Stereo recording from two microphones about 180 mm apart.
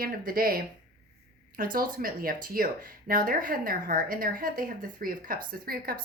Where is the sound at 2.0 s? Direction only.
50° right (ahead or behind).